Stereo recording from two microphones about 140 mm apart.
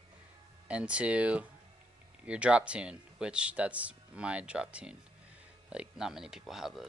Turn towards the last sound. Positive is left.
turn(degrees=0)  # may be behind; listen again after turning